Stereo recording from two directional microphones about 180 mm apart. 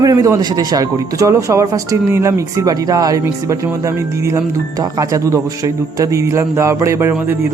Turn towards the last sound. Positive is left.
turn(degrees=-15)  # may be behind; listen again after turning